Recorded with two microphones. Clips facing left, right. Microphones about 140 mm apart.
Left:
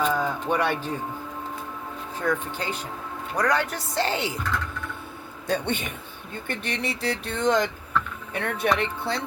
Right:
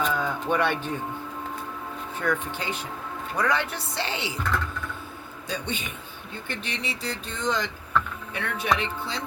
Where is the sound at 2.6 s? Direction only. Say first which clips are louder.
Left 1 dB; 40° left (ahead or behind).